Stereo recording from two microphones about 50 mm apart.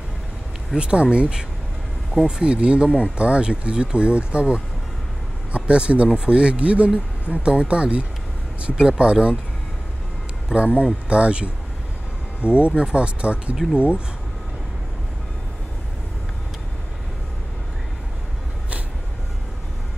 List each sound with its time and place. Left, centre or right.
0.7 s speech: centre
10.5 s speech: right